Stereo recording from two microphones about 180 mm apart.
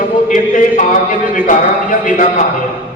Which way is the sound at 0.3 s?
45° left (ahead or behind).